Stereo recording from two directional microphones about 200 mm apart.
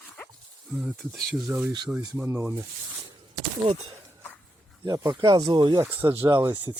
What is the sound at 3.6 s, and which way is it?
Speech, 30° right (ahead or behind).